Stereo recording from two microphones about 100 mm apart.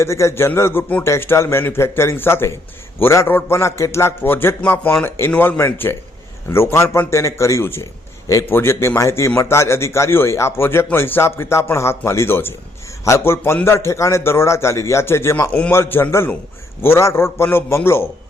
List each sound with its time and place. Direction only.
0.0 s a man's voice: 30° left (ahead or behind)